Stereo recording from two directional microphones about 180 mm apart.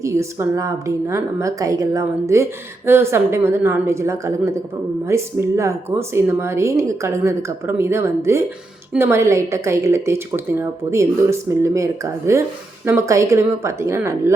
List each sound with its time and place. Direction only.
0.0 s speech: 15° right (ahead or behind)